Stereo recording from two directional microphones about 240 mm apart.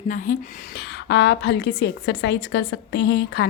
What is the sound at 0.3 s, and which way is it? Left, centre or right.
A woman's voice, left.